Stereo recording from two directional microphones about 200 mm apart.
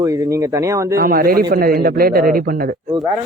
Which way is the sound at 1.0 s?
45° right (ahead or behind).